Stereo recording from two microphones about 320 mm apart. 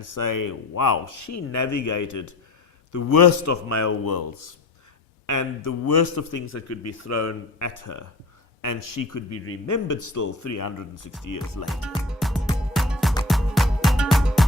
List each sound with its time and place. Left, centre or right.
0.0 s speech: left
2.9 s a man's voice: left
5.2 s a man's voice: left
6.5 s speech: left
8.6 s speech: left
9.3 s speech: left
9.6 s a man's voice: left
11.3 s music: left
11.6 s music: centre